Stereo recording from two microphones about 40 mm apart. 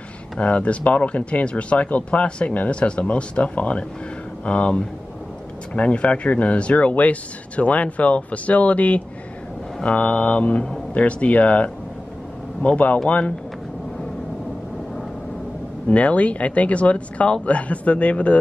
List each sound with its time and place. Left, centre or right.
0.4 s speech: left
15.9 s speech: left